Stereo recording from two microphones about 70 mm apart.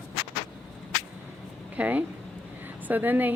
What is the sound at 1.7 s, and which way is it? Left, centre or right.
Speech, right.